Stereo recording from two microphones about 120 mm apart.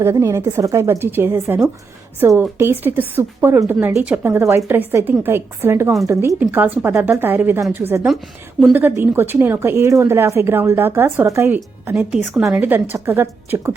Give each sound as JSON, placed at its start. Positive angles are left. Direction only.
{"t": 0.0, "sound": "a woman's voice", "side_deg": -25}
{"t": 12.5, "sound": "a woman's voice", "side_deg": -15}